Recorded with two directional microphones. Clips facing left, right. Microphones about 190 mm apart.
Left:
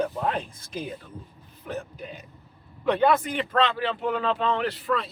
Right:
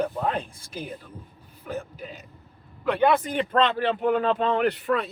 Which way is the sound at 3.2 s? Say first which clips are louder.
Right 2 dB; 45° right (ahead or behind).